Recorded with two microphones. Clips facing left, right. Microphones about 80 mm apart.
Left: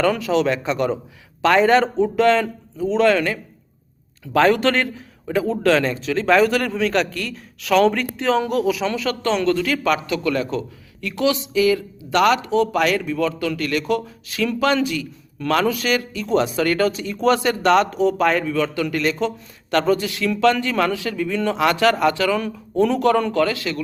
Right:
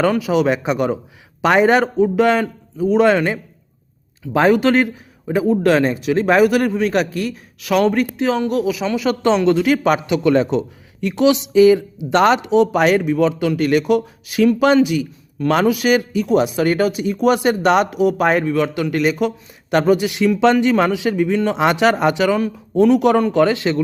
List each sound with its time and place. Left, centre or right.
0.1 s a man's voice: centre
9.0 s a man's voice: centre
22.4 s a man's voice: centre; by 23.8 s right